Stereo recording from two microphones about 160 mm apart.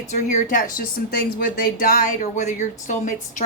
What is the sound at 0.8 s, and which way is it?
Speech, 75° left (ahead or behind).